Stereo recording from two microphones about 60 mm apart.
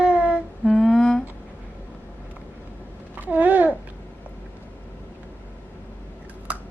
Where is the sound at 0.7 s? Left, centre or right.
Centre.